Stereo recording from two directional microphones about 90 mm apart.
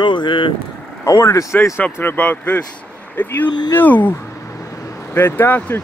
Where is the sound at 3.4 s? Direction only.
55° left (ahead or behind).